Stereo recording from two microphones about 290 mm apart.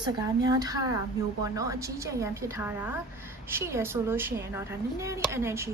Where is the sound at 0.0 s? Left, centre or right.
Centre.